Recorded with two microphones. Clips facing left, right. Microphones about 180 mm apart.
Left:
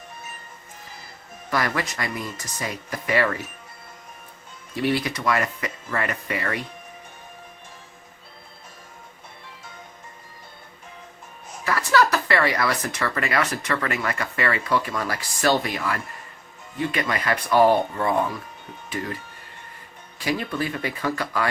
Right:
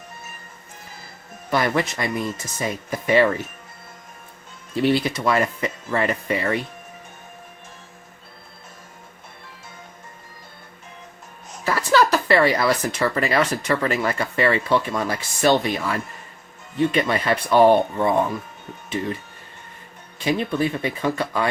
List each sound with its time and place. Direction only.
1.5 s speech: 25° right (ahead or behind)
4.7 s speech: 25° right (ahead or behind)
11.6 s speech: 25° right (ahead or behind)